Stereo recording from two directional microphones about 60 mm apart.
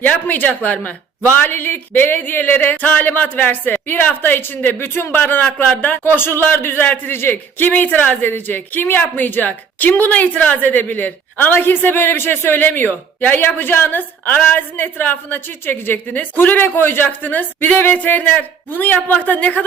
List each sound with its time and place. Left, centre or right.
0.0 s a man's voice: left